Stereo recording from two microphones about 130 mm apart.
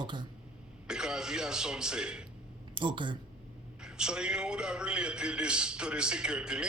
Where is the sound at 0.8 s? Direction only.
5° right (ahead or behind).